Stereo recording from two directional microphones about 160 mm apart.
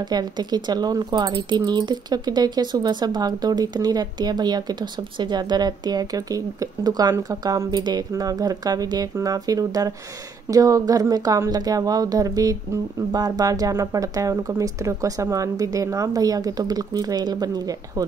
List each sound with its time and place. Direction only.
0.0 s speech: 25° right (ahead or behind)